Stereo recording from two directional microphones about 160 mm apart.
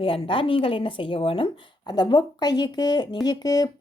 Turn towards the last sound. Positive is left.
turn(degrees=25)  # may be behind; listen again after turning